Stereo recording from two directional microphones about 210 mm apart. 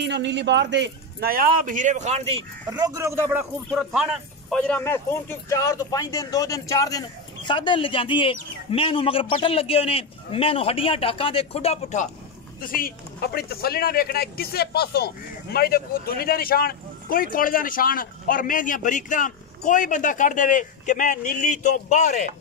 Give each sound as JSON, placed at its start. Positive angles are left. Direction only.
{"t": 0.0, "sound": "speech", "side_deg": -55}
{"t": 2.7, "sound": "speech", "side_deg": -15}
{"t": 3.7, "sound": "speech", "side_deg": 0}
{"t": 12.5, "sound": "speech", "side_deg": 45}